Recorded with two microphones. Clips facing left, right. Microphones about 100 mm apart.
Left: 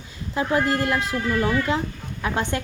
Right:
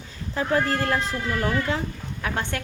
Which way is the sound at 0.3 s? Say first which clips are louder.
Left 2 dB; 15° left (ahead or behind).